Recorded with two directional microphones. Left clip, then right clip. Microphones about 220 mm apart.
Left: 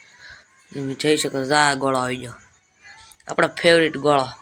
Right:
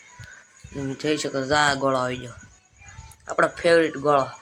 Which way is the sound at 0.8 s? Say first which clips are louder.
Left 5 dB; 15° left (ahead or behind).